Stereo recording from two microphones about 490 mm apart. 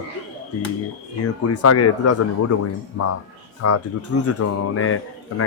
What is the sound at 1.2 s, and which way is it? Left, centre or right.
Speech, left.